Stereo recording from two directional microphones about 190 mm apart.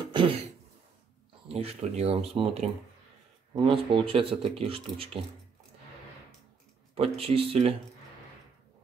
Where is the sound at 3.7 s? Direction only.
30° right (ahead or behind).